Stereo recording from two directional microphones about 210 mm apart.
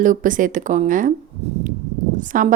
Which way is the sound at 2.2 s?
40° right (ahead or behind).